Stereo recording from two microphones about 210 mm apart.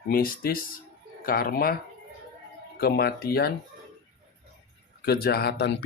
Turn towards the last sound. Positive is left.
turn(degrees=55)  # may be behind; listen again after turning